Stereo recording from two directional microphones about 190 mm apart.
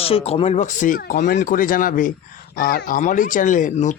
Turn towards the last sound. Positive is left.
turn(degrees=40)  # may be behind; listen again after turning